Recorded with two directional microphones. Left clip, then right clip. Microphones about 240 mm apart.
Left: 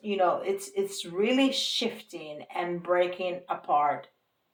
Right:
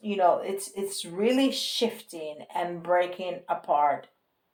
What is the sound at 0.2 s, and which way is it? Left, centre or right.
Speech, right.